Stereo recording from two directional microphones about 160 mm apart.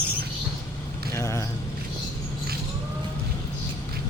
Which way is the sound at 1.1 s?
20° left (ahead or behind).